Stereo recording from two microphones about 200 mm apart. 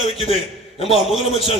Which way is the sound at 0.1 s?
30° left (ahead or behind).